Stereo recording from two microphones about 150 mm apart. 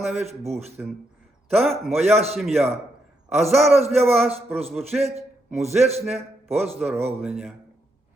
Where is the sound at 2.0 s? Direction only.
45° right (ahead or behind).